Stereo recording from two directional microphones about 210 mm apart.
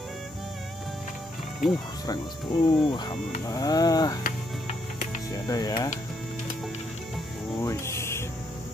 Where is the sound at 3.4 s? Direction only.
15° left (ahead or behind).